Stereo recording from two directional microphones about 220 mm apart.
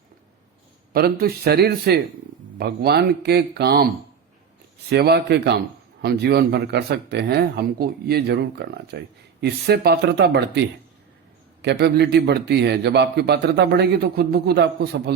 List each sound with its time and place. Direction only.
0.9 s a man's voice: 45° right (ahead or behind)
4.9 s a man's voice: 50° right (ahead or behind)
11.6 s a man's voice: 50° right (ahead or behind)